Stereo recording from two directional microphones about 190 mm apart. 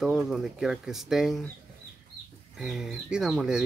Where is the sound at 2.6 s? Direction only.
Centre (ahead or behind).